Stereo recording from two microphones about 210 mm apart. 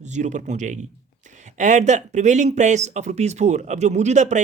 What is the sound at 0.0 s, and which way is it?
Speech, 35° right (ahead or behind).